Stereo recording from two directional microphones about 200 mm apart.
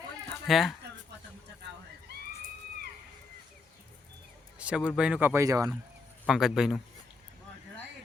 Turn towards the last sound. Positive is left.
turn(degrees=0)  # may be behind; listen again after turning